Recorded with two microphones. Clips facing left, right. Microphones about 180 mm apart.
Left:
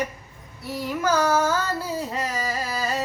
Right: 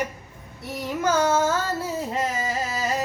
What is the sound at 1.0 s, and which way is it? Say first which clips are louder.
Child singing: even; 25° right (ahead or behind).